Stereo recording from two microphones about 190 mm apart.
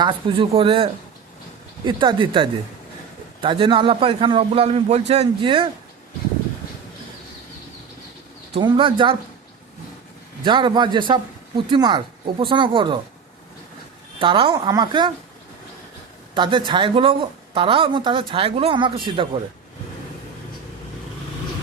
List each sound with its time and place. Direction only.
0.0 s speech: 25° right (ahead or behind)
8.5 s speech: 25° right (ahead or behind)
10.4 s speech: 25° right (ahead or behind)
14.2 s speech: 25° right (ahead or behind)
16.3 s speech: 25° right (ahead or behind)